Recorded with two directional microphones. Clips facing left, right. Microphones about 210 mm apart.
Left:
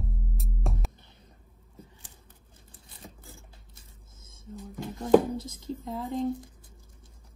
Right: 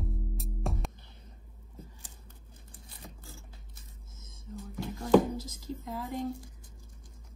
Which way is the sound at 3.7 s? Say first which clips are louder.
Right 1 dB; 30° left (ahead or behind).